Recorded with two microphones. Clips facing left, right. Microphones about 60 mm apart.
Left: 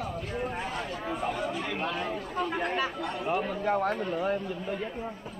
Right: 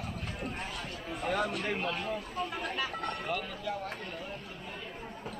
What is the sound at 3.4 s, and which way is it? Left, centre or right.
Speech, left.